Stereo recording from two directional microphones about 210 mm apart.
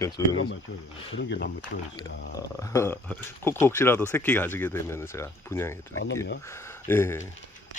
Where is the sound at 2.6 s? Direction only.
15° left (ahead or behind).